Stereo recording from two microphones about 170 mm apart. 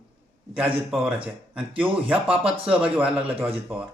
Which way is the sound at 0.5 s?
5° right (ahead or behind).